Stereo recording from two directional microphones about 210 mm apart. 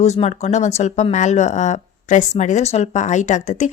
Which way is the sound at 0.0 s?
30° left (ahead or behind).